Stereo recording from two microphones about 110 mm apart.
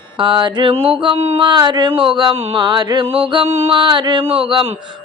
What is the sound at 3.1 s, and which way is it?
Speech, 55° right (ahead or behind).